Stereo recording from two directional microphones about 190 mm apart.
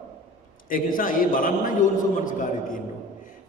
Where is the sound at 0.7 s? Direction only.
45° left (ahead or behind).